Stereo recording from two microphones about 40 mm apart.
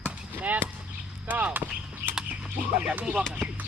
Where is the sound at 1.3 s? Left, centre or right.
Right.